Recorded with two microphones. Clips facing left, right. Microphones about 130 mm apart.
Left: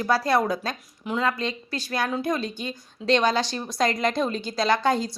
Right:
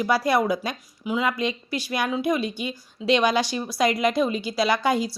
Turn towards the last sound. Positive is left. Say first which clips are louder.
# even
turn(degrees=-10)  # may be behind; listen again after turning